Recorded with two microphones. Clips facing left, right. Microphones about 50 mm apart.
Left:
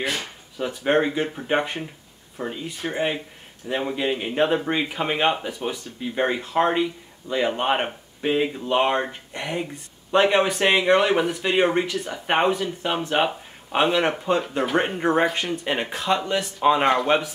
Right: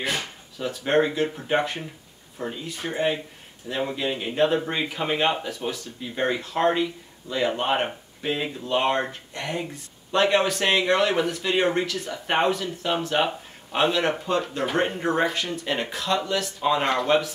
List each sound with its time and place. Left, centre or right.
0.6 s speech: centre